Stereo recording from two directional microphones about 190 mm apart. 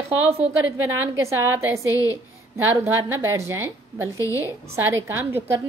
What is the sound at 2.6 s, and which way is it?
A woman's voice, 10° right (ahead or behind).